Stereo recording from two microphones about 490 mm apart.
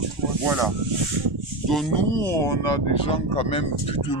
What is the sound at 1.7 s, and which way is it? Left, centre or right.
Speech, centre.